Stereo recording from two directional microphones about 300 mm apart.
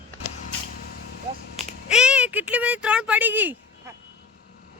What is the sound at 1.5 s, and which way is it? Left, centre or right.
Speech, centre.